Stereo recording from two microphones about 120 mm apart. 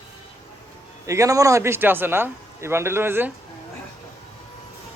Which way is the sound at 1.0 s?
25° right (ahead or behind).